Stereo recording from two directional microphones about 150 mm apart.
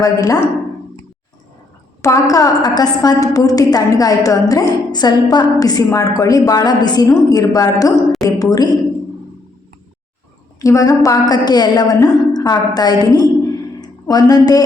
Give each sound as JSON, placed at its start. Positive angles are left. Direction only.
{"t": 0.0, "sound": "a woman's voice", "side_deg": 25}
{"t": 2.0, "sound": "a woman's voice", "side_deg": 20}
{"t": 10.6, "sound": "a woman's voice", "side_deg": 20}